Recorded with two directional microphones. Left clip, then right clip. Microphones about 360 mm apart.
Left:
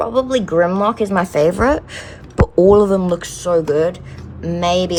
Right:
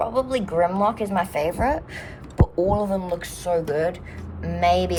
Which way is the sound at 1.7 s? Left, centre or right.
Centre.